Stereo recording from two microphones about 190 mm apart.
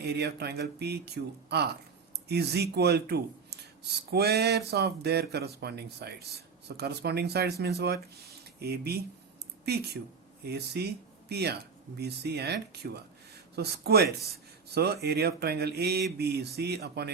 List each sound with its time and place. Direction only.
0.0 s a man's voice: 60° right (ahead or behind)